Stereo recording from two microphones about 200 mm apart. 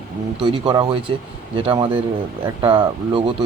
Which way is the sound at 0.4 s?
25° right (ahead or behind).